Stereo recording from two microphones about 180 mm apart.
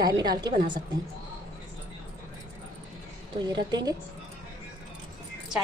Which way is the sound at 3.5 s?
25° right (ahead or behind).